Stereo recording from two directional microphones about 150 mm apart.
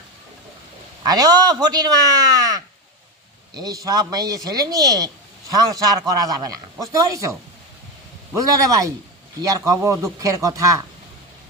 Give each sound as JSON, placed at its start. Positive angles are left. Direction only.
{"t": 1.0, "sound": "speech", "side_deg": -25}